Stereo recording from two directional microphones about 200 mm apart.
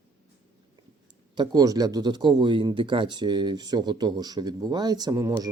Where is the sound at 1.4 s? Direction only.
20° right (ahead or behind).